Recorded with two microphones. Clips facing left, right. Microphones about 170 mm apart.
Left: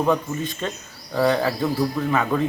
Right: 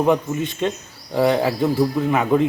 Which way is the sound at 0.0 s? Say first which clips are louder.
Right 3 dB; 20° right (ahead or behind).